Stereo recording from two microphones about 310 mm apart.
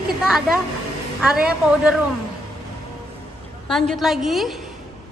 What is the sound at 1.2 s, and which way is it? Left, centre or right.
Speech, centre.